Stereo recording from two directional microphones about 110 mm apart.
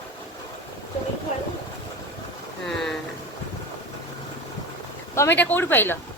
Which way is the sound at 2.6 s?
5° left (ahead or behind).